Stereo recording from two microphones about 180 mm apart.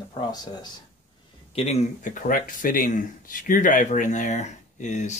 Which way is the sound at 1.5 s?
35° left (ahead or behind).